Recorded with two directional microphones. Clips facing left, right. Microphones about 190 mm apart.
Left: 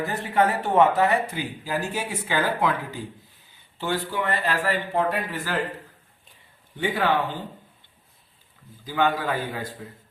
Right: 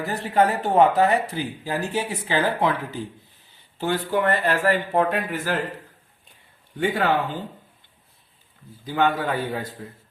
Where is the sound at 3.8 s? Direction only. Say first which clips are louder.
Right 4 dB; 50° right (ahead or behind).